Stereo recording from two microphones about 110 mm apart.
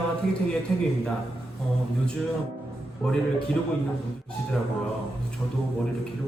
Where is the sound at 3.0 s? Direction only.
5° left (ahead or behind).